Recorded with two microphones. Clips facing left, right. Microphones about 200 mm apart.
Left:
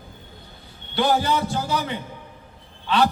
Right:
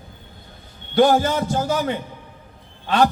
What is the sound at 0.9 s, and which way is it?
Speech, 45° right (ahead or behind).